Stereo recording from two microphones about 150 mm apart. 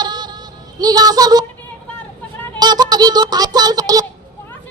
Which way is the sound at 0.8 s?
25° right (ahead or behind).